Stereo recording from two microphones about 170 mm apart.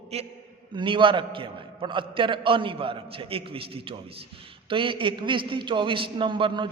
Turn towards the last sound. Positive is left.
turn(degrees=-30)  # may be behind; listen again after turning